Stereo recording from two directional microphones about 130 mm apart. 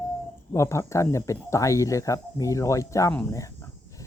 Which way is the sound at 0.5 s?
20° left (ahead or behind).